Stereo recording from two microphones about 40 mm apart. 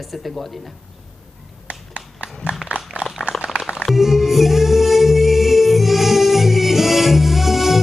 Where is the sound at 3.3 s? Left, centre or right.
Centre.